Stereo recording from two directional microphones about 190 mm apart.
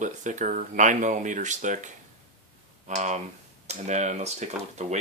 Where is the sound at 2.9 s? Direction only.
40° right (ahead or behind).